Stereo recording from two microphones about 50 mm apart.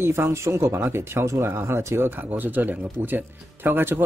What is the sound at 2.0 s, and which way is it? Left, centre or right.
Speech, right.